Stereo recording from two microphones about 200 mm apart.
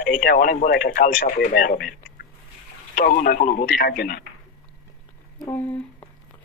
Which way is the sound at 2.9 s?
45° left (ahead or behind).